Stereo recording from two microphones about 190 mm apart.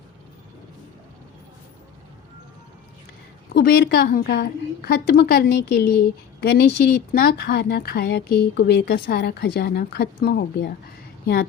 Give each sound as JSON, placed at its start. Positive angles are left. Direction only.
{"t": 3.5, "sound": "speech", "side_deg": 60}